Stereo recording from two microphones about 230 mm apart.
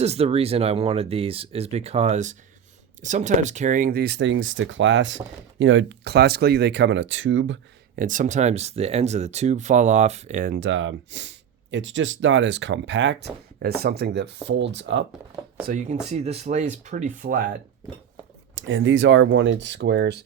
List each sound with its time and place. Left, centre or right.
0.0 s speech: right
7.9 s speech: right
10.5 s speech: right
13.6 s speech: right
15.6 s speech: right
18.5 s speech: right